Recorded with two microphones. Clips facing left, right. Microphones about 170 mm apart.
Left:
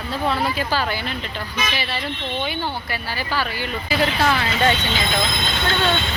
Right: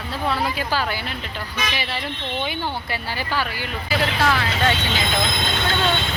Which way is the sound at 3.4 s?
10° right (ahead or behind).